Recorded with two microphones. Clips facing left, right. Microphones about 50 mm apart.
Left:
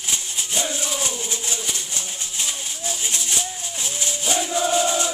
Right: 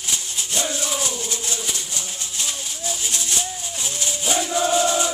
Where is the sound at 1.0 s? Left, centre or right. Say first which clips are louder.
Even; left.